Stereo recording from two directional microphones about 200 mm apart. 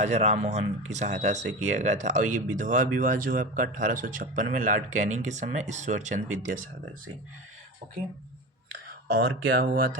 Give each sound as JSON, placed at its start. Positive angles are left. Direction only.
{"t": 0.0, "sound": "speech", "side_deg": -35}
{"t": 9.0, "sound": "speech", "side_deg": -50}